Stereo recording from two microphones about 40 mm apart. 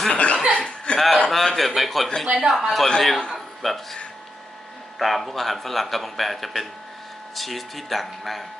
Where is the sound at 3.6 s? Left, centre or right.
Centre.